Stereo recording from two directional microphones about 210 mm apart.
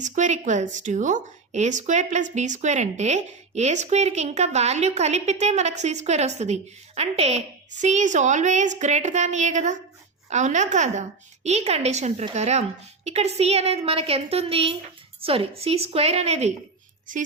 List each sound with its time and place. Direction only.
0.0 s a woman's voice: 35° right (ahead or behind)